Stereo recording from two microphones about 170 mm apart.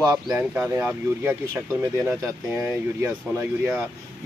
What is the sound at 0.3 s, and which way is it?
Speech, 10° right (ahead or behind).